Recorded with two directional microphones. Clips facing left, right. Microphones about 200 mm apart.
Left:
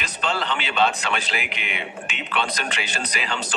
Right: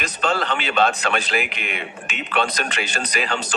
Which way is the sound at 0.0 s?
45° right (ahead or behind).